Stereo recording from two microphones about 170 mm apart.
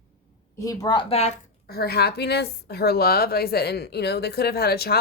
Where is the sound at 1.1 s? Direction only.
40° left (ahead or behind).